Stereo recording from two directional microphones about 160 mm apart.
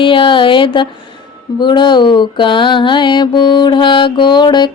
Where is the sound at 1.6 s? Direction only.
30° left (ahead or behind).